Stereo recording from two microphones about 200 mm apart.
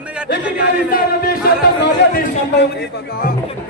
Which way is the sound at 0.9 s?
50° left (ahead or behind).